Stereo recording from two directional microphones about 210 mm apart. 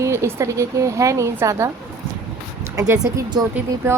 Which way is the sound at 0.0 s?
15° right (ahead or behind).